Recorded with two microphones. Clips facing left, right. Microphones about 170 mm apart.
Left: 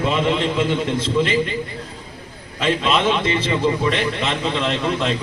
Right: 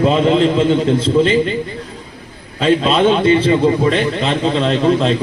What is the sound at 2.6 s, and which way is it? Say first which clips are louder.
A man's voice: right 6 dB; 30° right (ahead or behind).